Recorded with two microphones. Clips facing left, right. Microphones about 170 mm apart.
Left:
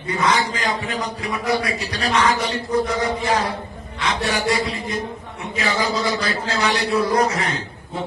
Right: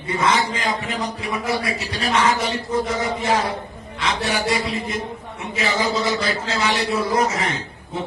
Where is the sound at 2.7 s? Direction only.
25° right (ahead or behind).